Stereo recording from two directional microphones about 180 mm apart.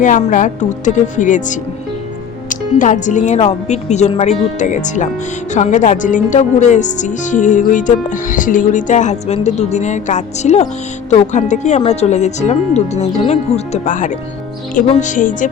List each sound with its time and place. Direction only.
0.0 s speech: 45° left (ahead or behind)